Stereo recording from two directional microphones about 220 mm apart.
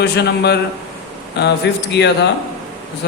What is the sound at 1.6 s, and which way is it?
Mantra, 50° left (ahead or behind).